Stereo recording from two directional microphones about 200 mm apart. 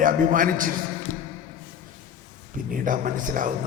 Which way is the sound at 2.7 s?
40° right (ahead or behind).